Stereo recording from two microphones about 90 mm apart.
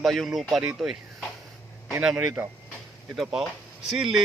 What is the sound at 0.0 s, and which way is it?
Speech, centre (ahead or behind).